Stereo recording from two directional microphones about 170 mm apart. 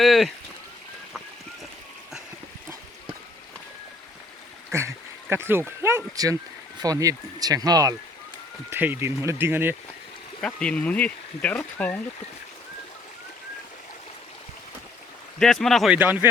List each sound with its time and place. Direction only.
0.0 s speech: centre (ahead or behind)
5.3 s speech: 15° right (ahead or behind)
10.4 s speech: 5° left (ahead or behind)
15.4 s speech: centre (ahead or behind)